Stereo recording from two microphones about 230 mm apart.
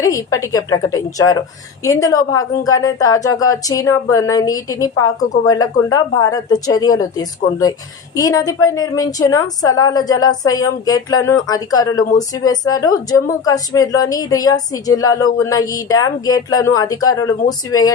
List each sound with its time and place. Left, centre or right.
0.0 s a woman's voice: centre